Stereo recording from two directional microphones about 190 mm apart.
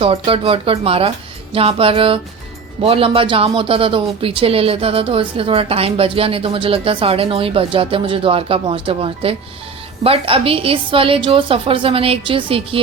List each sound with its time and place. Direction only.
0.0 s speech: 30° right (ahead or behind)